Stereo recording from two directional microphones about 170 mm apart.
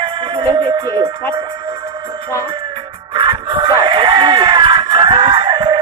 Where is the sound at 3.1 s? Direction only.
30° right (ahead or behind).